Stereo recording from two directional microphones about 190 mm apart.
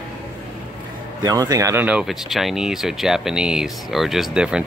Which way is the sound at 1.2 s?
20° right (ahead or behind).